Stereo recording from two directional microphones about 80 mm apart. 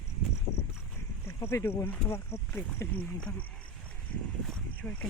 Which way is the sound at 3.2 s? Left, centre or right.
Centre.